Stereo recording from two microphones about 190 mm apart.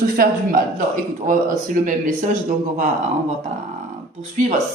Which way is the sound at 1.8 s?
45° right (ahead or behind).